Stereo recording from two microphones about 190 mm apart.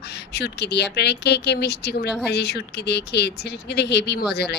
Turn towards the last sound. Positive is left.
turn(degrees=60)  # may be behind; listen again after turning